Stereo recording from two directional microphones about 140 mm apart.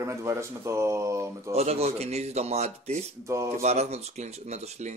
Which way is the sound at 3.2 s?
20° right (ahead or behind).